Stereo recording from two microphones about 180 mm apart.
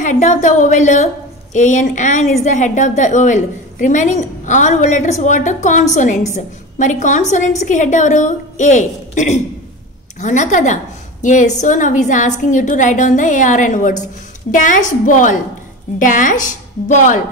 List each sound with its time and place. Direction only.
0.0 s a woman's voice: 45° left (ahead or behind)